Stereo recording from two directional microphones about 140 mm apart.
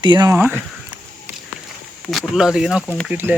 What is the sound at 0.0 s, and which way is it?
Speech, 35° right (ahead or behind).